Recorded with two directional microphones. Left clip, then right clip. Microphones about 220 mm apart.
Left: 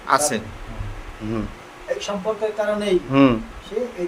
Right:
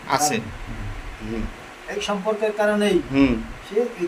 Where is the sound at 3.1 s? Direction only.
30° left (ahead or behind).